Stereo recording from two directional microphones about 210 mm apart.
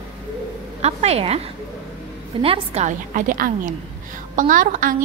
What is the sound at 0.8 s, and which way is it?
Speech, 30° right (ahead or behind).